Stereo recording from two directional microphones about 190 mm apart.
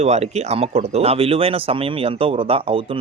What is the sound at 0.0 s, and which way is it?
Speech, 35° right (ahead or behind).